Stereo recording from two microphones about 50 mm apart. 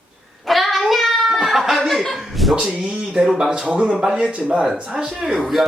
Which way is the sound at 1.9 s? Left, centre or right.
Centre.